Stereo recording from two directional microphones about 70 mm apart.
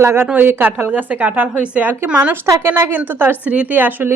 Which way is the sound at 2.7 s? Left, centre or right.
Right.